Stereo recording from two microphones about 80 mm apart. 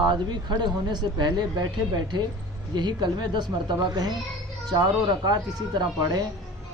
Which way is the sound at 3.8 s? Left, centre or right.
Right.